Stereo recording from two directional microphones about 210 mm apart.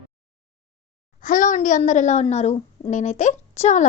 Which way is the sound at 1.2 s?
40° left (ahead or behind).